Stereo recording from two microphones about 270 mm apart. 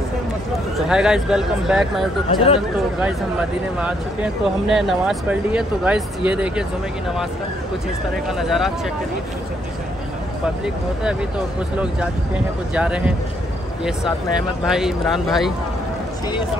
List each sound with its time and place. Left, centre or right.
0.7 s speech: centre
2.2 s speech: left
3.0 s speech: centre
8.3 s speech: centre
11.7 s speech: centre
14.6 s speech: centre